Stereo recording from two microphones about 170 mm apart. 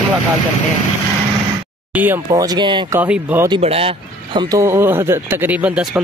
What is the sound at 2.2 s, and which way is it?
Speech, 25° right (ahead or behind).